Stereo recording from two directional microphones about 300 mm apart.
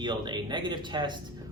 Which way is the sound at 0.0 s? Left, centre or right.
Centre.